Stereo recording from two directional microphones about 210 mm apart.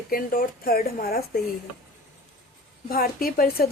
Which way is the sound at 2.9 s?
45° left (ahead or behind).